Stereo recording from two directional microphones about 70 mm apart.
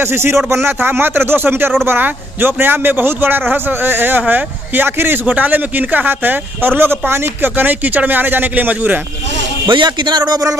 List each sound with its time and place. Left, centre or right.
0.0 s speech: right
9.7 s a man's voice: right